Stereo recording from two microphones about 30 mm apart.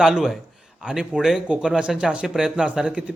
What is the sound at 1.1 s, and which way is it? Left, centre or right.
Speech, centre.